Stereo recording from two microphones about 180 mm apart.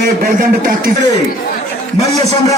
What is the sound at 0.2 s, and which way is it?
Speech, 50° right (ahead or behind).